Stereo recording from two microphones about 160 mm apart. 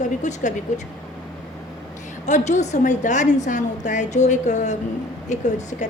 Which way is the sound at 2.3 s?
45° left (ahead or behind).